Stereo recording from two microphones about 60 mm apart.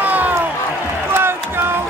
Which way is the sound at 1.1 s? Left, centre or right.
Right.